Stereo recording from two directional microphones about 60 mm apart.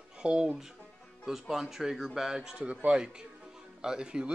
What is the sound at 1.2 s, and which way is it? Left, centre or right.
Speech, centre.